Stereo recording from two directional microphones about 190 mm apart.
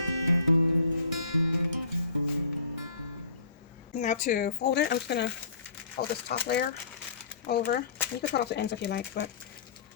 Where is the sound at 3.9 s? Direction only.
40° left (ahead or behind); by 9.0 s 65° left (ahead or behind).